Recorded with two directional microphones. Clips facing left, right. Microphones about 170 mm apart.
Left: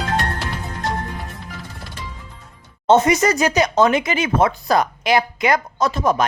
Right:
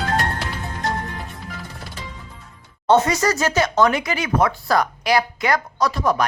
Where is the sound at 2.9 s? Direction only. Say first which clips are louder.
Left 2 dB; 20° left (ahead or behind).